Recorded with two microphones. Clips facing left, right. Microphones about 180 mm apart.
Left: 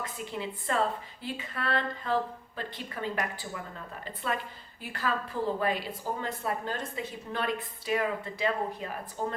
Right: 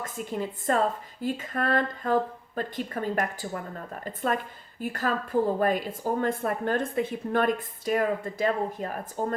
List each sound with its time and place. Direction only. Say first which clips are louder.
0.0 s a woman's voice: right 4 dB; 45° right (ahead or behind)